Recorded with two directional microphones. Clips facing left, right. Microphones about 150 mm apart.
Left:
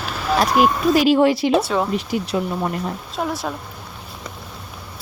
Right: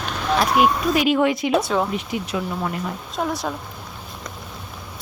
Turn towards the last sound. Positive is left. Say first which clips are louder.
# even
turn(degrees=0)  # may be behind; listen again after turning